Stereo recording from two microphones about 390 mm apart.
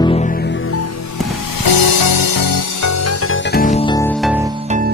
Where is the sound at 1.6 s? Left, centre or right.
Left.